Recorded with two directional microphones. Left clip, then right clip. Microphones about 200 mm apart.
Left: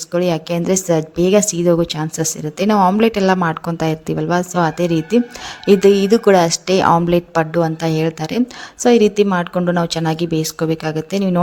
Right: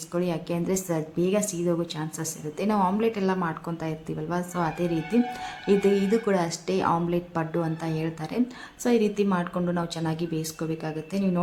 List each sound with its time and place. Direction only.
0.1 s a woman's voice: 40° left (ahead or behind)